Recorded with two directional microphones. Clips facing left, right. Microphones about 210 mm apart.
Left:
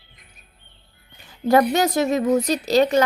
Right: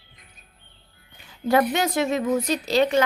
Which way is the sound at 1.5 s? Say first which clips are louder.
Left 4 dB; 40° left (ahead or behind).